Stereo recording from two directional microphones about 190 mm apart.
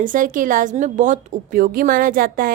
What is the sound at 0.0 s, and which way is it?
A woman's voice, 45° right (ahead or behind).